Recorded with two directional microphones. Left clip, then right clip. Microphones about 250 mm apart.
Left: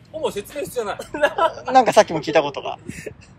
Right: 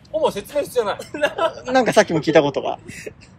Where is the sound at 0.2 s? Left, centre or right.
Centre.